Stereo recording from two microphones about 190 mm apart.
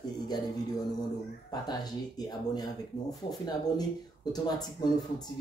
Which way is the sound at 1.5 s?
20° left (ahead or behind).